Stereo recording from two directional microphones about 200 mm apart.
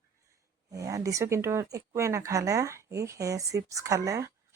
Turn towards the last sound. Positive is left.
turn(degrees=-15)  # may be behind; listen again after turning